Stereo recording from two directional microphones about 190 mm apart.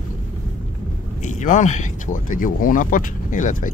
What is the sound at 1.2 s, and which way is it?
Speech, 40° left (ahead or behind).